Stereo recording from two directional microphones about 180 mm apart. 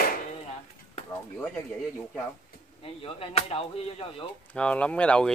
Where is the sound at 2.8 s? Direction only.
30° left (ahead or behind).